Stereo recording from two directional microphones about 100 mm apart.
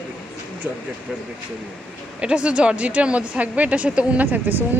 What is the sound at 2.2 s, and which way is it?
Speech, 10° right (ahead or behind).